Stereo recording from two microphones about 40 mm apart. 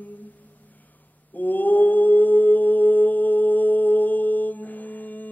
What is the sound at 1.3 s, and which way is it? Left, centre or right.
Mantra, left.